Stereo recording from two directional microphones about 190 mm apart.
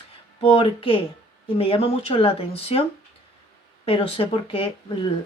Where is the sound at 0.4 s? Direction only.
30° left (ahead or behind).